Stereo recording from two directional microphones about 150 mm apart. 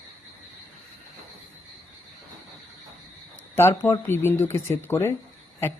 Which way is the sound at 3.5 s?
15° left (ahead or behind).